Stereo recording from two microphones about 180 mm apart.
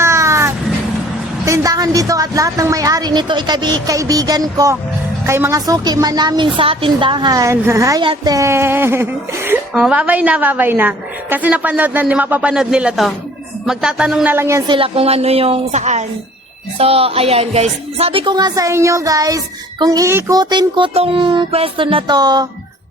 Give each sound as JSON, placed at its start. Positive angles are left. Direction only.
{"t": 0.0, "sound": "vehicle", "side_deg": -15}
{"t": 1.5, "sound": "a woman's voice", "side_deg": -20}
{"t": 14.7, "sound": "a woman's voice", "side_deg": -30}